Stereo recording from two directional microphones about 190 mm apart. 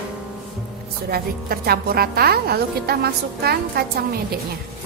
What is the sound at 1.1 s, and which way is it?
A woman's voice, 55° right (ahead or behind).